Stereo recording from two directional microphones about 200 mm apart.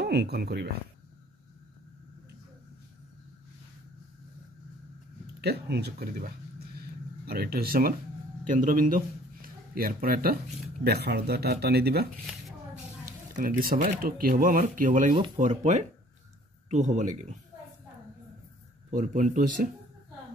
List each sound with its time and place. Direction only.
0.0 s speech: 55° right (ahead or behind)
5.4 s a man's voice: 55° right (ahead or behind); by 17.4 s 35° right (ahead or behind)
18.9 s a man's voice: 40° right (ahead or behind)